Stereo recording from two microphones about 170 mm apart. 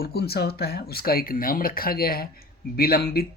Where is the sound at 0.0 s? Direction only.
65° left (ahead or behind).